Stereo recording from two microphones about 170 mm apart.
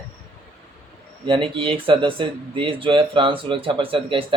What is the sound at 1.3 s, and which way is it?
Speech, 30° right (ahead or behind).